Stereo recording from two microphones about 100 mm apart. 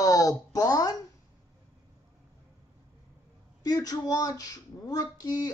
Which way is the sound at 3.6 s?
40° left (ahead or behind).